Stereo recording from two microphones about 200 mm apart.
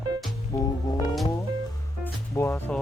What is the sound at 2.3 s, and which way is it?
Music, 10° left (ahead or behind).